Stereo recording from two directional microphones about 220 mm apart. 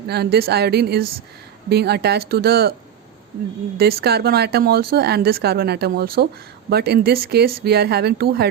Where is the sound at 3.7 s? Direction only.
45° right (ahead or behind).